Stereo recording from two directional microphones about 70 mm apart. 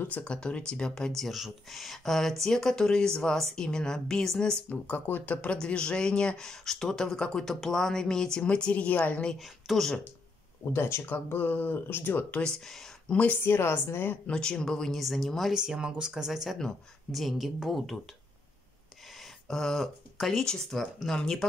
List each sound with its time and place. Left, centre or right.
0.2 s speech: centre
9.3 s speech: centre
10.7 s a woman's voice: left
12.4 s speech: centre
13.1 s speech: centre
13.4 s a woman's voice: left
14.2 s speech: centre
15.5 s speech: centre
19.4 s speech: centre